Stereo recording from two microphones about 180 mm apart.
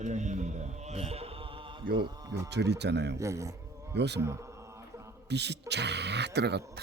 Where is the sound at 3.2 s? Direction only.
15° right (ahead or behind).